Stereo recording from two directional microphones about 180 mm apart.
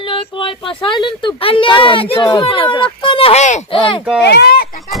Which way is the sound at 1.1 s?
30° left (ahead or behind).